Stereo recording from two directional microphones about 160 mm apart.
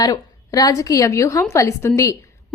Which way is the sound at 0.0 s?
25° left (ahead or behind).